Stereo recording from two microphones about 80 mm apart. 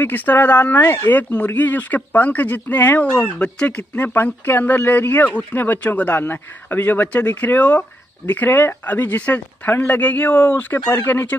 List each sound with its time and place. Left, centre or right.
0.0 s speech: left